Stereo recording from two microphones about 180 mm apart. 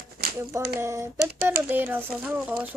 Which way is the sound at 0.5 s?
15° right (ahead or behind).